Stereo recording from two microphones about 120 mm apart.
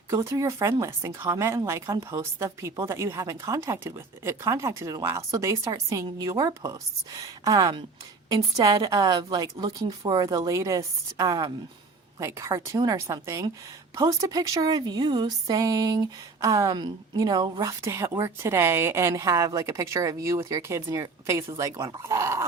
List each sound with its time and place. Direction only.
0.1 s a woman's voice: 25° right (ahead or behind)